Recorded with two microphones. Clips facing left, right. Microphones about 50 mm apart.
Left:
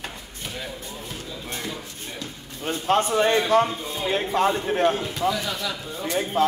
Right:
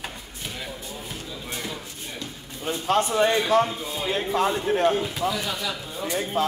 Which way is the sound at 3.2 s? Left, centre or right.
Centre.